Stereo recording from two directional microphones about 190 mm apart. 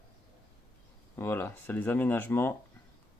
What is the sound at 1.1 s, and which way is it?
Speech, 10° left (ahead or behind).